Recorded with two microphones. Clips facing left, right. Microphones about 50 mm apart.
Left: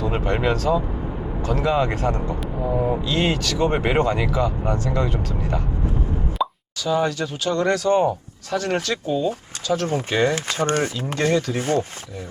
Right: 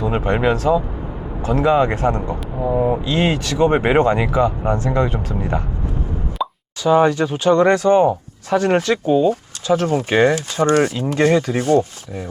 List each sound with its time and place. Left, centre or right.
0.0 s speech: centre
1.4 s speech: right
6.4 s plop: centre
6.8 s speech: right
11.6 s speech: left